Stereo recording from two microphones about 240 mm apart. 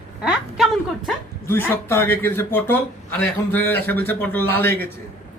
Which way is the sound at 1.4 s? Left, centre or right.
Centre.